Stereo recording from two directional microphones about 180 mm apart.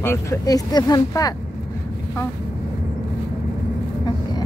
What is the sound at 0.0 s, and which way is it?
Speech, 15° left (ahead or behind).